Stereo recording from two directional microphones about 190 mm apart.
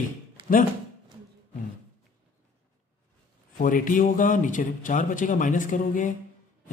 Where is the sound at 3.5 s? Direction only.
45° left (ahead or behind).